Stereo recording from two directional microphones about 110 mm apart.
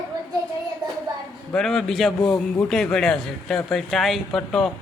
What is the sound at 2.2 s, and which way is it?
Speech, 20° left (ahead or behind).